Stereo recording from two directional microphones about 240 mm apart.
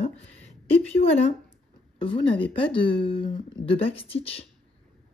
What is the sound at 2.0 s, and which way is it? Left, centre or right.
Speech, left.